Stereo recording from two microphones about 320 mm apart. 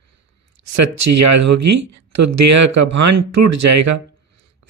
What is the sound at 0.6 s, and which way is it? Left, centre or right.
Speech, right.